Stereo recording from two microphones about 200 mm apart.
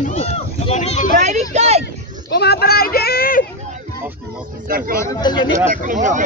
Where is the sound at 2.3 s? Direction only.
55° left (ahead or behind).